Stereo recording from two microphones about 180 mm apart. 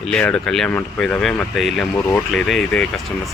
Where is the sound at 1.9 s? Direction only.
10° left (ahead or behind).